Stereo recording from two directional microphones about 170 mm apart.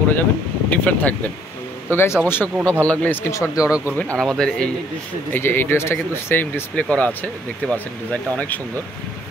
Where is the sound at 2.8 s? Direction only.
10° left (ahead or behind).